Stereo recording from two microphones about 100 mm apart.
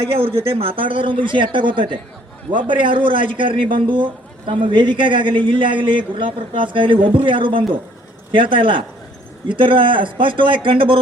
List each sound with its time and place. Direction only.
0.1 s a man's voice: 65° right (ahead or behind)